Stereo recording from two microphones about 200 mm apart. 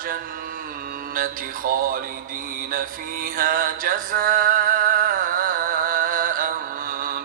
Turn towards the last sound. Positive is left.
turn(degrees=-45)  # may be behind; listen again after turning